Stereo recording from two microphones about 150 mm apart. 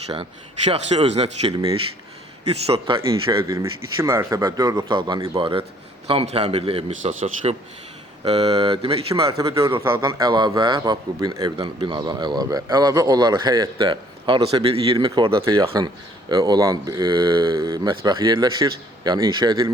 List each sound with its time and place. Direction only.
0.1 s speech: 40° right (ahead or behind)
3.3 s a man's voice: 20° right (ahead or behind)
5.4 s speech: 35° right (ahead or behind)
7.0 s speech: 55° right (ahead or behind)
8.3 s speech: 40° right (ahead or behind)
9.4 s a man's voice: 20° right (ahead or behind)
10.0 s a man's voice: 30° right (ahead or behind)
14.9 s a man's voice: 25° right (ahead or behind)